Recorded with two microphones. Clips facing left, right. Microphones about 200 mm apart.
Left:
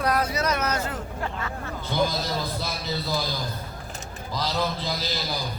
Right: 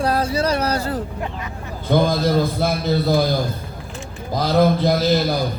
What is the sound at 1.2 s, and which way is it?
Speech, 15° right (ahead or behind).